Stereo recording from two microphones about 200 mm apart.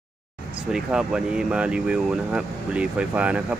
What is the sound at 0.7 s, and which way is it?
Speech, 5° right (ahead or behind).